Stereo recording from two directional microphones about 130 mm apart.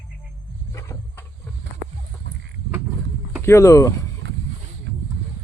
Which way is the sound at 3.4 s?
25° left (ahead or behind).